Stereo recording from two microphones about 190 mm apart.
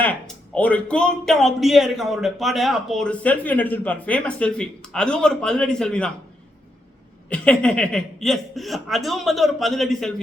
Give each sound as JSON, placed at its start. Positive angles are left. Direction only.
{"t": 0.0, "sound": "speech", "side_deg": 10}
{"t": 7.3, "sound": "speech", "side_deg": 5}